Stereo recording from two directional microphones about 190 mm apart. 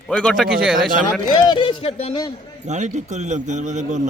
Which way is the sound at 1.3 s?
25° left (ahead or behind).